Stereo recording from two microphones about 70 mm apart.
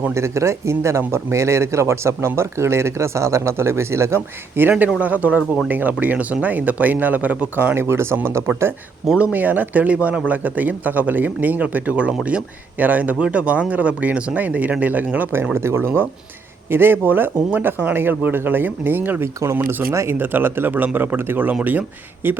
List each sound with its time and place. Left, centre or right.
0.1 s speech: right
4.9 s speech: right
9.3 s speech: right
19.9 s speech: right
20.1 s speech: right